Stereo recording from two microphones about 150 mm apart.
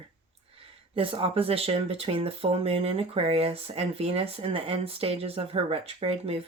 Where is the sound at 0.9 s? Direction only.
40° right (ahead or behind).